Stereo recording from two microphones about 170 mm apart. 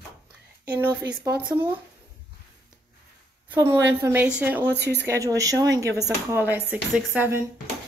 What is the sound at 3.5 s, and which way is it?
A woman's voice, 15° right (ahead or behind).